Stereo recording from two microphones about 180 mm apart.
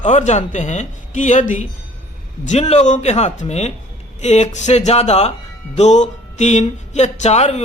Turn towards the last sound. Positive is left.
turn(degrees=40)  # may be behind; listen again after turning